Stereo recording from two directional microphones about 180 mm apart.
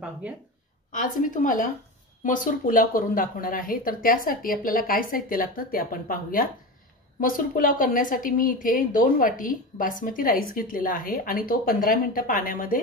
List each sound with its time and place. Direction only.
0.9 s speech: 45° left (ahead or behind)